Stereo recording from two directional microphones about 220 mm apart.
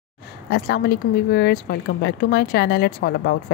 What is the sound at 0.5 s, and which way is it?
A woman's voice, 50° left (ahead or behind).